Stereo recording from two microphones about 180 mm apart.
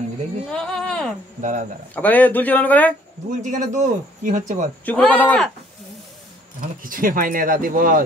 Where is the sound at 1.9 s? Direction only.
10° left (ahead or behind).